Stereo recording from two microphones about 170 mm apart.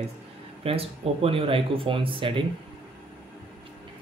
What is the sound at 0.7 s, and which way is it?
Speech, 35° right (ahead or behind).